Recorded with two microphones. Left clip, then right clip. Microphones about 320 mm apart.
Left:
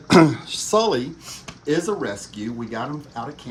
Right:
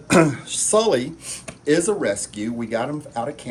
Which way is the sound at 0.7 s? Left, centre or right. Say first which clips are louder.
Right 1 dB; centre.